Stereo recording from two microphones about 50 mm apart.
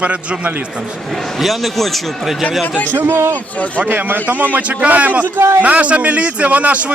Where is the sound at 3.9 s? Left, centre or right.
Right.